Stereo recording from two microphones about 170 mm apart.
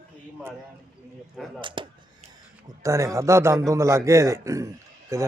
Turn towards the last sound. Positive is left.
turn(degrees=-20)  # may be behind; listen again after turning